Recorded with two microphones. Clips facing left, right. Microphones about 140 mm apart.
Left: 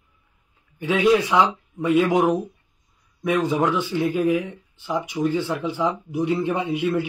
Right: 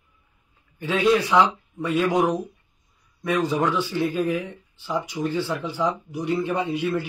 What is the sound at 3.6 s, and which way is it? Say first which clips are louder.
Speech: left 2 dB; 20° left (ahead or behind).